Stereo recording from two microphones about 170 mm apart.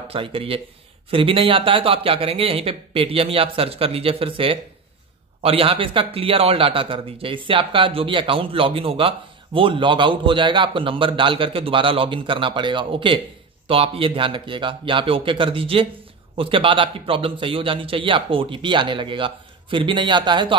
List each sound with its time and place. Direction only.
0.1 s a man's voice: 30° right (ahead or behind)